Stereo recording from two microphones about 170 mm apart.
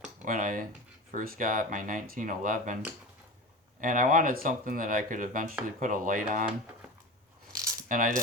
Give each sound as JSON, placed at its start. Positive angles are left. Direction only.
{"t": 0.3, "sound": "speech", "side_deg": -55}
{"t": 3.8, "sound": "speech", "side_deg": -55}
{"t": 7.9, "sound": "speech", "side_deg": -55}